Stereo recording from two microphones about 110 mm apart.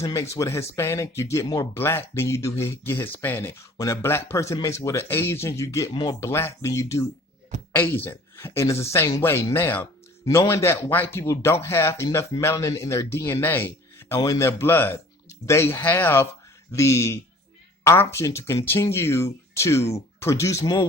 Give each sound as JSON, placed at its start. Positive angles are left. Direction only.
{"t": 0.0, "sound": "speech", "side_deg": 30}
{"t": 5.9, "sound": "speech", "side_deg": 45}
{"t": 6.1, "sound": "speech", "side_deg": 25}
{"t": 9.8, "sound": "a sound", "side_deg": 30}
{"t": 10.5, "sound": "speech", "side_deg": 25}
{"t": 12.0, "sound": "speech", "side_deg": 35}